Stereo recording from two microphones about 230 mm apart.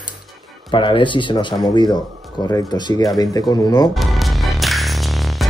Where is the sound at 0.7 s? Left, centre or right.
Left.